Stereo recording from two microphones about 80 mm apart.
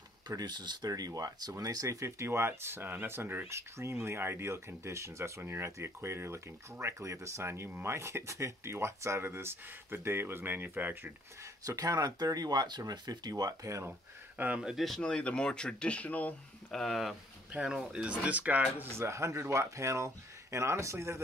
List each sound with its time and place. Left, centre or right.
0.3 s speech: right
11.6 s speech: right
14.4 s speech: centre
14.9 s speech: centre
16.7 s speech: centre
17.5 s speech: centre
18.9 s speech: right